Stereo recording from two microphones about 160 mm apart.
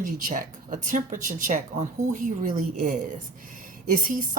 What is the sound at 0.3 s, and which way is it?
Speech, 55° right (ahead or behind).